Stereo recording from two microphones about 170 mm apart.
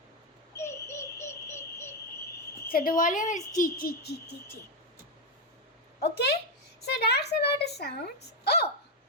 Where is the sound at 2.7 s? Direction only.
55° left (ahead or behind).